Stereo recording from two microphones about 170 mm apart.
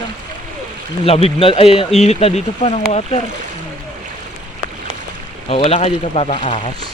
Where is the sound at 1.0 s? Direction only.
35° left (ahead or behind).